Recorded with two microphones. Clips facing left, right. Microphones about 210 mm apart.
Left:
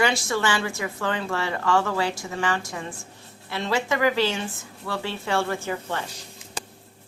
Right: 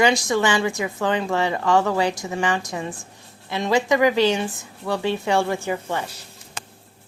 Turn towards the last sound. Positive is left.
turn(degrees=-15)  # may be behind; listen again after turning